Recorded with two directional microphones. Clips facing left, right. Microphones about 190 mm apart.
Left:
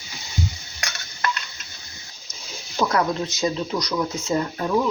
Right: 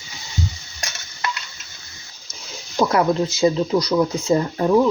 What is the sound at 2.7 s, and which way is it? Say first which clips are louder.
Speech: right 4 dB; 25° right (ahead or behind).